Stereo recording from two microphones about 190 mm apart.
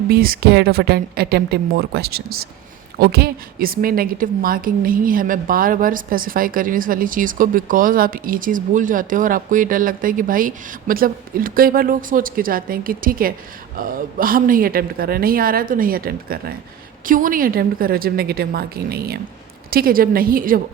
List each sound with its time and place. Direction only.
0.1 s a woman's voice: 50° right (ahead or behind)